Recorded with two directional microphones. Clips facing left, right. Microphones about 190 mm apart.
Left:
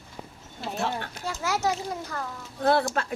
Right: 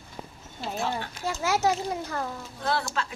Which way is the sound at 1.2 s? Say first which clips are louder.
Right 3 dB; 25° right (ahead or behind).